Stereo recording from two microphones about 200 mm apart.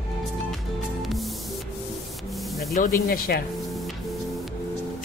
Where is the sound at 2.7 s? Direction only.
45° left (ahead or behind).